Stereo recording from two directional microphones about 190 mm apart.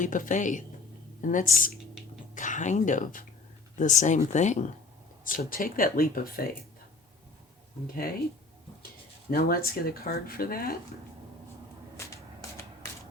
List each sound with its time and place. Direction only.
0.0 s speech: 40° left (ahead or behind)
9.3 s speech: 50° left (ahead or behind)
12.0 s shuffling cards: 15° left (ahead or behind)